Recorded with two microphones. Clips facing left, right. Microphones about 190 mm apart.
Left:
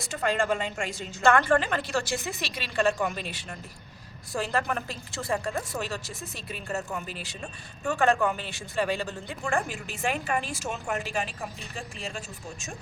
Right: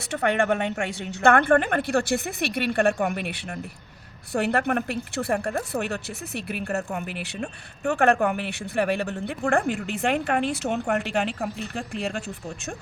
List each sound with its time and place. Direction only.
0.1 s a woman's voice: 65° right (ahead or behind)